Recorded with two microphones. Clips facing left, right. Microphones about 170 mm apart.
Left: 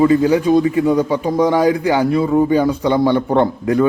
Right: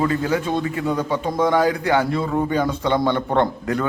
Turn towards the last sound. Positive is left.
turn(degrees=10)  # may be behind; listen again after turning